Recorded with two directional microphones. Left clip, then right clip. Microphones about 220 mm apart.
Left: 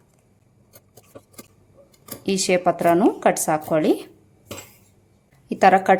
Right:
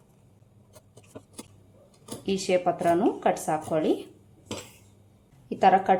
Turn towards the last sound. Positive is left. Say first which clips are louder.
# left 5 dB
turn(degrees=30)  # may be behind; listen again after turning